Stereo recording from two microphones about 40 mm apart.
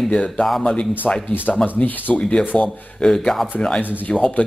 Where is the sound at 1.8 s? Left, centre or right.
Left.